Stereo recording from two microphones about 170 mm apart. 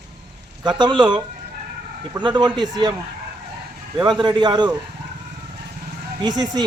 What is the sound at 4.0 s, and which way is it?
Speech, 25° right (ahead or behind).